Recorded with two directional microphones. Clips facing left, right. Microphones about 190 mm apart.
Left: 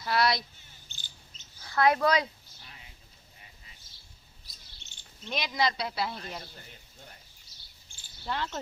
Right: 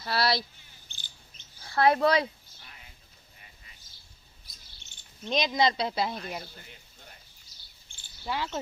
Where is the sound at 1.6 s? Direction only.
30° right (ahead or behind).